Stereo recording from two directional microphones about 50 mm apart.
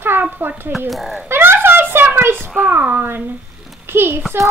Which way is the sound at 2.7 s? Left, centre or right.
Right.